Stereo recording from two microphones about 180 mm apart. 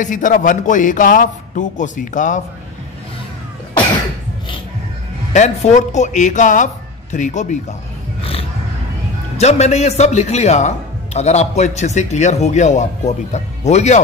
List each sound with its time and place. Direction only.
0.0 s a man's voice: 45° left (ahead or behind)
5.3 s a man's voice: 40° left (ahead or behind)
8.2 s a sound: 30° left (ahead or behind)
9.4 s speech: 40° left (ahead or behind)